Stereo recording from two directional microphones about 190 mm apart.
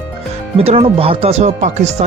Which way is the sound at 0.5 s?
30° right (ahead or behind).